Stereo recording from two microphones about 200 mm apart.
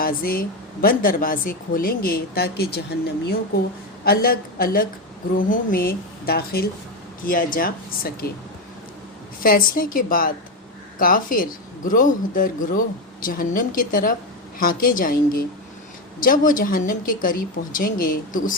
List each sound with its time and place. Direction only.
0.0 s speech: 45° left (ahead or behind)
4.0 s speech: 50° left (ahead or behind)
9.4 s speech: 45° left (ahead or behind)